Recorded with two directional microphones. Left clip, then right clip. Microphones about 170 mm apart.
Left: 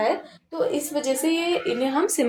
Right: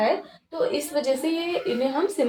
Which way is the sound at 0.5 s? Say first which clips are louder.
Even; 40° left (ahead or behind).